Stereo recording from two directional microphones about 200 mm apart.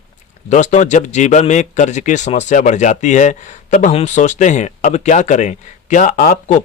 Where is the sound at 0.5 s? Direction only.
35° left (ahead or behind).